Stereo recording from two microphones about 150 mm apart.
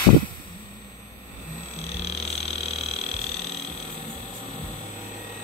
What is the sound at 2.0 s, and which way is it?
Frog, 40° left (ahead or behind).